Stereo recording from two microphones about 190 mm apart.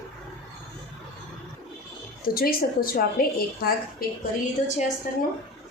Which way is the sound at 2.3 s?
50° left (ahead or behind).